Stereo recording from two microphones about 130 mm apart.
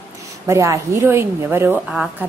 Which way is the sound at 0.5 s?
25° right (ahead or behind).